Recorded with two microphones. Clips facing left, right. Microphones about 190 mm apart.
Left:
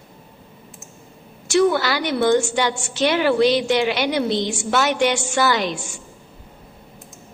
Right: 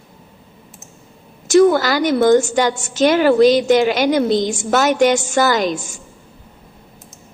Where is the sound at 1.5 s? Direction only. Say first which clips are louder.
Right 6 dB; 45° right (ahead or behind).